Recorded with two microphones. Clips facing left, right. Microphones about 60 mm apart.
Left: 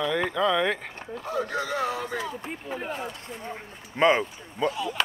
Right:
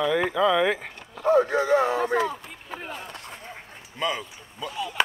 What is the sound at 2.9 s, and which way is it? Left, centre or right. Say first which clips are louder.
Speech: left 3 dB; left.